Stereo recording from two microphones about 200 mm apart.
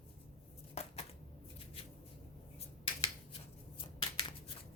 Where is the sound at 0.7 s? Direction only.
30° left (ahead or behind).